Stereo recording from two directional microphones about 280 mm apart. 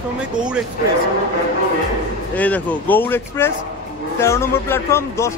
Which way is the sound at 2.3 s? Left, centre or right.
Centre.